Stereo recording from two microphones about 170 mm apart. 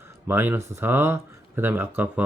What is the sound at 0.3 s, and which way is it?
Speech, 15° right (ahead or behind).